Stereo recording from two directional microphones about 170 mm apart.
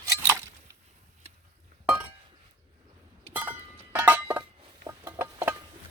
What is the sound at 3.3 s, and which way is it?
Music, 10° right (ahead or behind).